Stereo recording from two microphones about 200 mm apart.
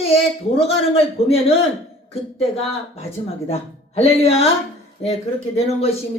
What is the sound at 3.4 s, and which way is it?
Speech, 30° left (ahead or behind).